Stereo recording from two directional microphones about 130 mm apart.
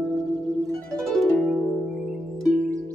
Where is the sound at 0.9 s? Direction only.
5° left (ahead or behind).